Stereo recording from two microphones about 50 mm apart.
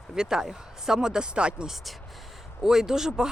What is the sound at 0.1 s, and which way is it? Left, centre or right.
Speech, centre.